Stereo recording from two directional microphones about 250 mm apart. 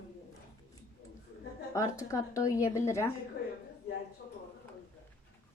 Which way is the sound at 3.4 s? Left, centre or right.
Left.